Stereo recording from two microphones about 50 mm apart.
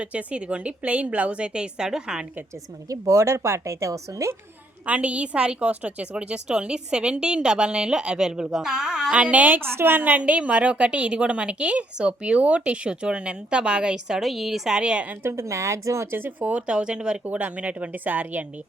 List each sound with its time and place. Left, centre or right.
0.0 s a woman's voice: right
3.1 s speech: right
4.9 s a woman's voice: right
9.2 s a woman's voice: right
9.6 s a woman's voice: right
10.0 s a woman's voice: right
14.2 s a woman's voice: centre
14.8 s a woman's voice: centre
15.2 s a woman's voice: right
16.1 s speech: right
16.5 s a woman's voice: right